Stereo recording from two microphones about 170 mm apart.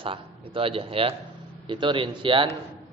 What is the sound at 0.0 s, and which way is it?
A man's voice, 30° right (ahead or behind).